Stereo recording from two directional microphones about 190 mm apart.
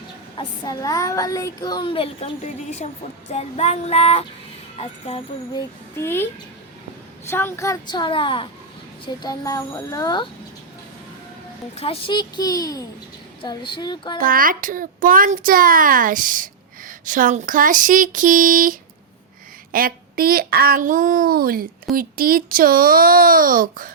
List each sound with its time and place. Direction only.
0.3 s a child's voice: 20° left (ahead or behind)
5.5 s a child's voice: 10° left (ahead or behind)
7.3 s a child's voice: 10° left (ahead or behind)
11.8 s a child's voice: 30° left (ahead or behind)
14.2 s a child's voice: 50° right (ahead or behind)